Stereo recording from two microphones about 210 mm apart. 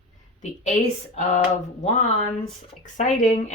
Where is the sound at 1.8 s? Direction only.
35° left (ahead or behind).